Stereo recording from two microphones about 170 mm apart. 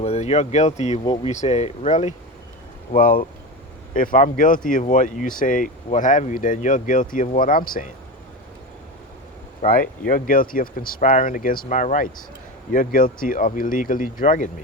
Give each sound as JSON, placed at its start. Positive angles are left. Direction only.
{"t": 0.0, "sound": "speech", "side_deg": 40}
{"t": 2.9, "sound": "speech", "side_deg": 55}
{"t": 10.1, "sound": "speech", "side_deg": 55}